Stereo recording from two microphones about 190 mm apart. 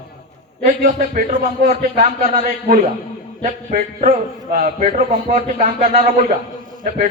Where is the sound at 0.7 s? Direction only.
45° right (ahead or behind).